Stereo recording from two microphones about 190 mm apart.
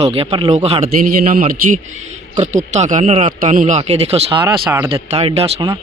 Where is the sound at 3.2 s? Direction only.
45° right (ahead or behind).